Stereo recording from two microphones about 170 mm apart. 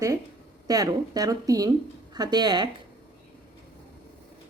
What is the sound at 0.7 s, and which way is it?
Speech, 20° right (ahead or behind).